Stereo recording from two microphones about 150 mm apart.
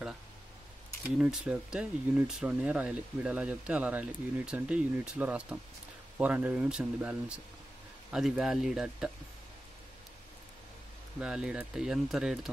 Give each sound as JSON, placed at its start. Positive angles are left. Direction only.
{"t": 1.1, "sound": "speech", "side_deg": -5}
{"t": 11.1, "sound": "speech", "side_deg": -5}